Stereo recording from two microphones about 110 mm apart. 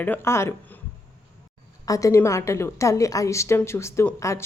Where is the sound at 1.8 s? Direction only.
30° left (ahead or behind).